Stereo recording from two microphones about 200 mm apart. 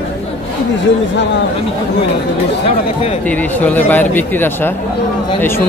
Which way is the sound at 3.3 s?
5° left (ahead or behind).